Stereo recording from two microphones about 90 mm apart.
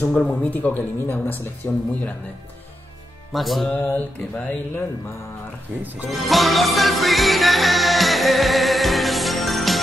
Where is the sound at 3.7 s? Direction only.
15° left (ahead or behind).